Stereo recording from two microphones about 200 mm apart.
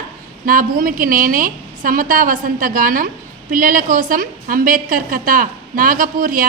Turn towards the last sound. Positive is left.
turn(degrees=-45)  # may be behind; listen again after turning